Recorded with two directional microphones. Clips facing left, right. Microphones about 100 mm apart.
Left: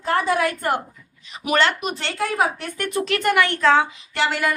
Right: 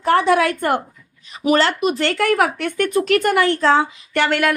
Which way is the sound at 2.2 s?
75° right (ahead or behind).